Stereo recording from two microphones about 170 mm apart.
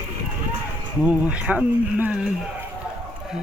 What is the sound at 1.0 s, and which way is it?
Speech, 5° right (ahead or behind).